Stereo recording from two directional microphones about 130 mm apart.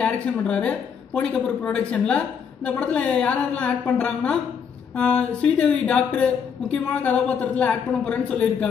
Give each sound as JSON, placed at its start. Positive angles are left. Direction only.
{"t": 0.0, "sound": "a woman's voice", "side_deg": 10}